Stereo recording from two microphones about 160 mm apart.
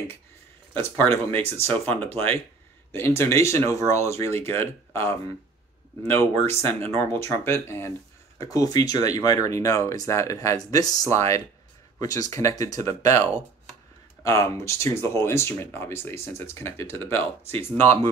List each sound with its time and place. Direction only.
0.7 s speech: 15° left (ahead or behind)
6.4 s speech: 40° right (ahead or behind)
6.9 s speech: 15° left (ahead or behind)